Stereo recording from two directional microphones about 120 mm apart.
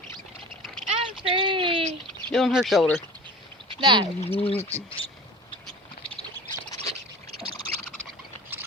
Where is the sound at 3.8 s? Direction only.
40° right (ahead or behind).